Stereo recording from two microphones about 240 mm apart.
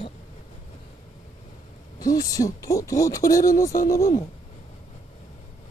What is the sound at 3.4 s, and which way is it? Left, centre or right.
Speech, left.